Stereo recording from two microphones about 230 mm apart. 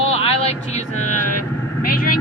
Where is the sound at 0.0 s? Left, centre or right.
Left.